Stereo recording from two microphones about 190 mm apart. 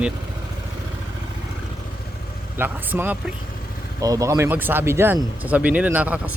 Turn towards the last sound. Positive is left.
turn(degrees=-10)  # may be behind; listen again after turning